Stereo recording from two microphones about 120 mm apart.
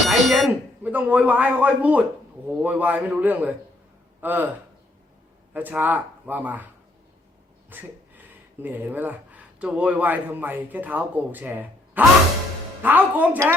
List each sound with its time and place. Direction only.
0.1 s speech: centre (ahead or behind)
0.8 s a man's voice: 15° right (ahead or behind)
5.5 s a man's voice: 15° right (ahead or behind)
7.7 s a sound: 15° right (ahead or behind)
8.6 s a man's voice: 15° right (ahead or behind)